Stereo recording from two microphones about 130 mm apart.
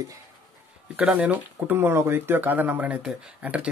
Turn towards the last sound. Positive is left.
turn(degrees=-10)  # may be behind; listen again after turning